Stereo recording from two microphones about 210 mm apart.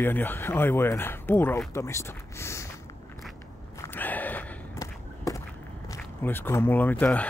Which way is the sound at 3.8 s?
10° left (ahead or behind).